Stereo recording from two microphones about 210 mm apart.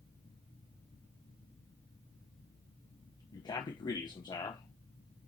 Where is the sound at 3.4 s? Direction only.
20° left (ahead or behind).